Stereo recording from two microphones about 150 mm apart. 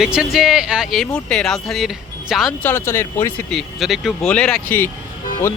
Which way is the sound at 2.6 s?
15° left (ahead or behind).